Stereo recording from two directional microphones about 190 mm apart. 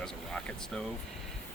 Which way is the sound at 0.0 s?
5° left (ahead or behind).